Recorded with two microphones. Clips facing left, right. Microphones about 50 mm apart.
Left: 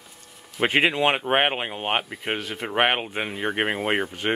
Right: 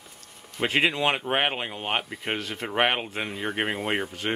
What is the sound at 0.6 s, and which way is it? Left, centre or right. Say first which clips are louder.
Speech: left 3 dB; centre.